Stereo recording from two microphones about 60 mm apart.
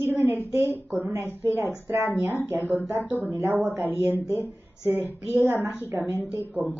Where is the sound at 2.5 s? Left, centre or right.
Right.